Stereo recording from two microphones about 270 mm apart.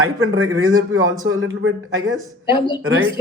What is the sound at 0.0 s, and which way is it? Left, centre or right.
A man's voice, right.